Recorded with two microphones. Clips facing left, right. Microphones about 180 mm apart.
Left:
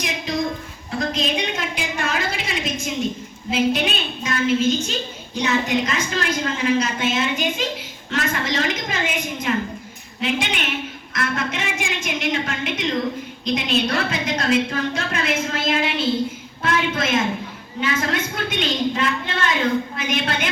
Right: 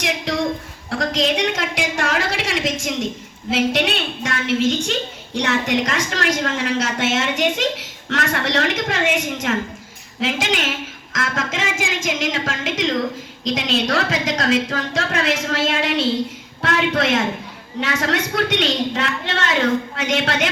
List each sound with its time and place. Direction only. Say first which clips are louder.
0.3 s a sound: even; 85° right
3.5 s a woman's voice: right 1 dB; 80° right
10.2 s a woman's voice: right 2 dB; 90° right